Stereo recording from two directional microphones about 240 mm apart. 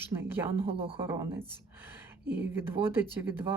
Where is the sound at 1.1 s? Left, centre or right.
Centre.